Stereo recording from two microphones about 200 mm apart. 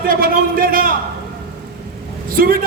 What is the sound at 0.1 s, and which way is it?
Speech, 45° right (ahead or behind).